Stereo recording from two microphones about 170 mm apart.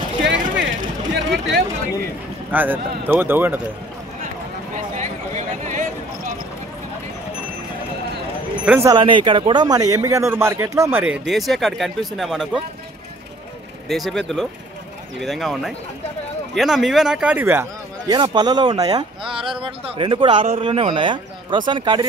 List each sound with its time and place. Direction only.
1.1 s a sound: 90° right
2.5 s speech: 10° right (ahead or behind)
4.9 s a sound: 45° right (ahead or behind)
8.6 s speech: 15° right (ahead or behind)
8.9 s a man's voice: 30° right (ahead or behind); by 11.1 s 10° right (ahead or behind)
11.2 s speech: centre (ahead or behind)
13.8 s speech: centre (ahead or behind)
18.1 s a man's voice: 25° right (ahead or behind)